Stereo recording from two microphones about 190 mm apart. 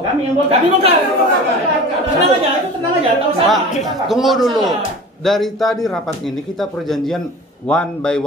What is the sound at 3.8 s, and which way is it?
Speech, centre (ahead or behind).